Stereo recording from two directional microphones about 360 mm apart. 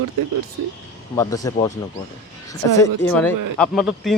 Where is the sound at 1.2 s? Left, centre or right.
Centre.